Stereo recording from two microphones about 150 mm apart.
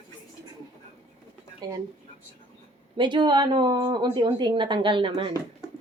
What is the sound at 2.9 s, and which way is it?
Speech, 30° right (ahead or behind).